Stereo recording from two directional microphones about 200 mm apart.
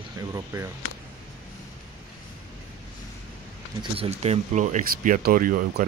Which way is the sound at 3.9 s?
30° right (ahead or behind).